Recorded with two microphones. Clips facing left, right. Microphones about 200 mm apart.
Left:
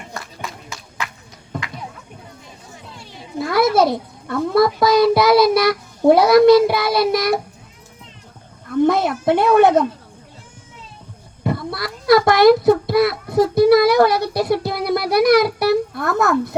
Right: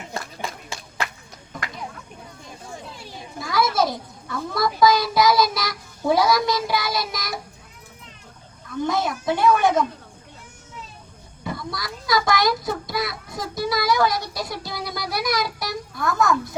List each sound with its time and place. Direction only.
3.3 s a child's voice: 60° left (ahead or behind)
8.8 s a woman's voice: 60° left (ahead or behind)
11.4 s a child's voice: 60° left (ahead or behind)